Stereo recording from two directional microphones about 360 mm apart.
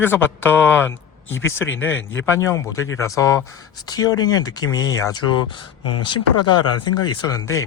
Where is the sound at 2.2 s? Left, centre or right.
Centre.